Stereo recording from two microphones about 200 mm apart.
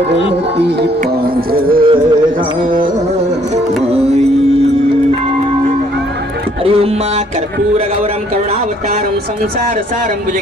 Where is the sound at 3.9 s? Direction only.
30° right (ahead or behind).